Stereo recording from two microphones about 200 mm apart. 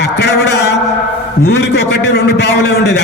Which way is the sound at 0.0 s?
60° left (ahead or behind).